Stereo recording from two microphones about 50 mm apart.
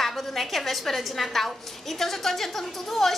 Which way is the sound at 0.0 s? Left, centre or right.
Centre.